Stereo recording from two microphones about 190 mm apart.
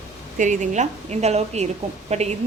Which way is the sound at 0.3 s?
40° right (ahead or behind).